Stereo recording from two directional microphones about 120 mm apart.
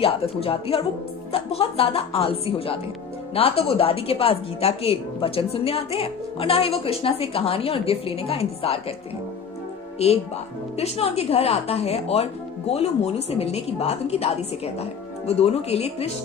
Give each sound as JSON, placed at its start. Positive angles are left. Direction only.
{"t": 0.0, "sound": "a woman's voice", "side_deg": 50}
{"t": 10.0, "sound": "a woman's voice", "side_deg": 60}